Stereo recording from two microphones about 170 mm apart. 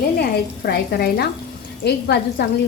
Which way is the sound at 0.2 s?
65° left (ahead or behind).